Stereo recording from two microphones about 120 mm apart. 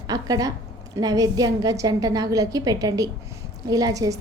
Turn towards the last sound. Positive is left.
turn(degrees=-30)  # may be behind; listen again after turning